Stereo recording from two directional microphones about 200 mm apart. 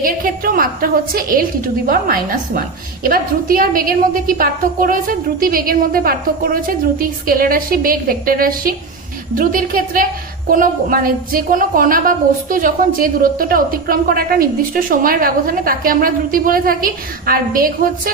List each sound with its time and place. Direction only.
0.0 s a woman's voice: 45° right (ahead or behind)
2.6 s a woman's voice: 45° right (ahead or behind)